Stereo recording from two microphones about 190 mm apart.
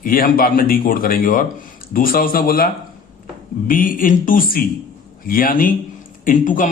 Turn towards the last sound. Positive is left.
turn(degrees=45)  # may be behind; listen again after turning